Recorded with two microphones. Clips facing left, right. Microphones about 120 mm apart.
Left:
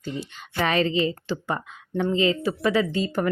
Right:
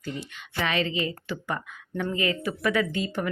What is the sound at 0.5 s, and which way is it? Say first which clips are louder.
Speech: left 5 dB; 40° left (ahead or behind).